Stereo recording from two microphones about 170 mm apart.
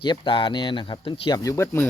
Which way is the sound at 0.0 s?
30° left (ahead or behind).